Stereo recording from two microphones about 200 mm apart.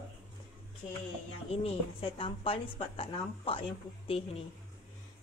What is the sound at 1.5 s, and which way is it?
Speech, 30° left (ahead or behind).